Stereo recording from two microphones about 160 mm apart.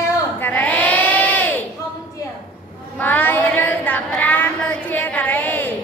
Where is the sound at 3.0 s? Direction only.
10° left (ahead or behind).